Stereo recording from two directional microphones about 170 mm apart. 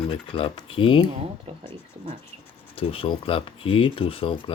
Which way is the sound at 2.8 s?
35° left (ahead or behind).